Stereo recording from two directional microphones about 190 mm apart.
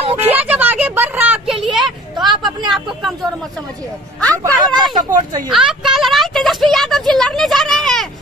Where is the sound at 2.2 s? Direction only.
25° right (ahead or behind).